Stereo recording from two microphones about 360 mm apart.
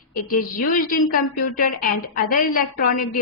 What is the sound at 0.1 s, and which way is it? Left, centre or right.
A woman's voice, left.